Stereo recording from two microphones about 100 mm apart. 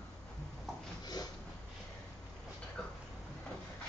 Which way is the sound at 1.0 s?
45° left (ahead or behind).